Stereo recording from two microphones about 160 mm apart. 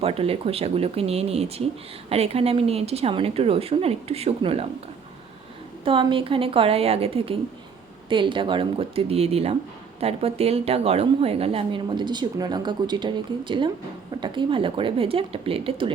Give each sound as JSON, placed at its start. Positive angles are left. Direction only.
{"t": 0.0, "sound": "speech", "side_deg": -35}
{"t": 5.8, "sound": "speech", "side_deg": -30}